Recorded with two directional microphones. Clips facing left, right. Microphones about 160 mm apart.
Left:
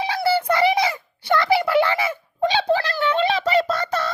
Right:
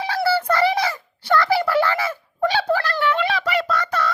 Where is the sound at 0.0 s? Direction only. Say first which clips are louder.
Even; 20° left (ahead or behind).